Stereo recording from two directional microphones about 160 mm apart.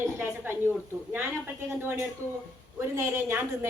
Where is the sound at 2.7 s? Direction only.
15° right (ahead or behind).